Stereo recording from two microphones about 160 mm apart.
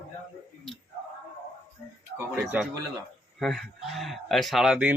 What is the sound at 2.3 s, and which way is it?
A man's voice, 5° right (ahead or behind).